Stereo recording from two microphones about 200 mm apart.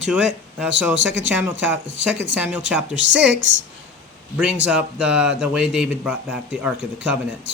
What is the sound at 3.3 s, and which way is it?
Speech, 70° right (ahead or behind).